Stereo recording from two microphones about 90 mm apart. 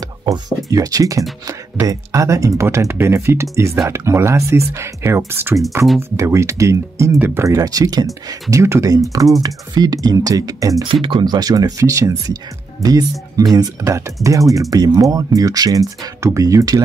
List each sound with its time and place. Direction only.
0.2 s speech: 45° right (ahead or behind)
7.2 s speech: 20° right (ahead or behind)
7.4 s speech: 40° right (ahead or behind)
10.8 s speech: 65° right (ahead or behind); by 16.8 s 40° right (ahead or behind)